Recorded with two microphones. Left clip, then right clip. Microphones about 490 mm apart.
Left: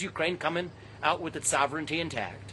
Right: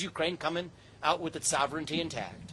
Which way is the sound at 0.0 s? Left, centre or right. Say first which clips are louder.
Left 2 dB; right.